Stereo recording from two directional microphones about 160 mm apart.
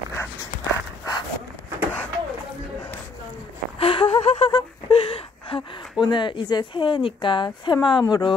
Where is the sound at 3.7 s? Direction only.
35° left (ahead or behind).